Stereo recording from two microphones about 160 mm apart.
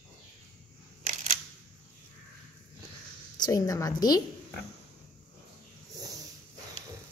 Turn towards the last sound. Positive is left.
turn(degrees=-25)  # may be behind; listen again after turning